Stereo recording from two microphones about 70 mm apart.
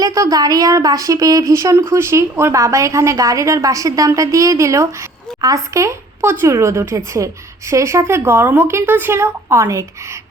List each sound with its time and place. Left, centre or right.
0.0 s speech: right